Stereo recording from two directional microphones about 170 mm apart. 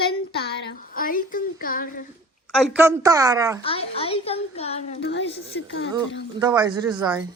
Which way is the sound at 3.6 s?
35° left (ahead or behind).